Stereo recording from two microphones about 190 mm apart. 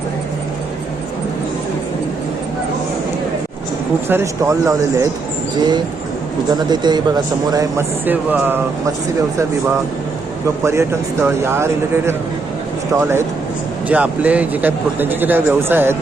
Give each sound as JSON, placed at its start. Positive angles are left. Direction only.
{"t": 4.1, "sound": "speech", "side_deg": -15}
{"t": 10.6, "sound": "speech", "side_deg": -15}